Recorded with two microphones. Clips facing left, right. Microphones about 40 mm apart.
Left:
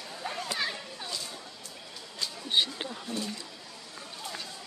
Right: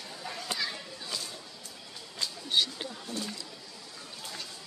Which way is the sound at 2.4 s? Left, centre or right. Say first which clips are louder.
Left 1 dB; left.